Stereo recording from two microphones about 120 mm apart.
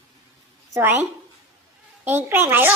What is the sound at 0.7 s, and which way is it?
A woman's voice, 15° right (ahead or behind).